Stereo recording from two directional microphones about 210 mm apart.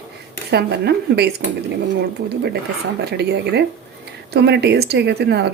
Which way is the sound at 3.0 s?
50° right (ahead or behind).